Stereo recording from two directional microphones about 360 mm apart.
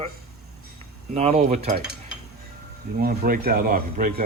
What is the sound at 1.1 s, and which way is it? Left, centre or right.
Speech, centre.